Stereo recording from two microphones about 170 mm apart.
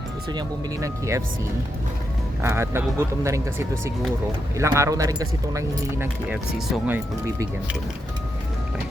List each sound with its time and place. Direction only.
0.3 s speech: 20° right (ahead or behind)
2.4 s speech: 15° right (ahead or behind)